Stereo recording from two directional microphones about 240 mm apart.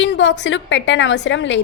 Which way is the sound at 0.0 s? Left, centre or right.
Left.